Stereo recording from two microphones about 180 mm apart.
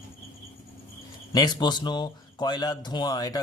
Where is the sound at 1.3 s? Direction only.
20° left (ahead or behind).